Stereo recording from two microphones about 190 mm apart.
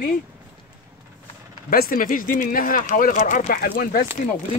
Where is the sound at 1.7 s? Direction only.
50° left (ahead or behind).